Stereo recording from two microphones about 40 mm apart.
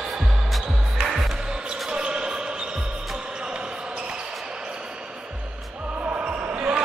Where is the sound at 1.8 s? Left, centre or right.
Right.